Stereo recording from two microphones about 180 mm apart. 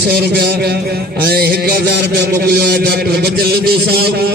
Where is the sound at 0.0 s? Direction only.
65° right (ahead or behind).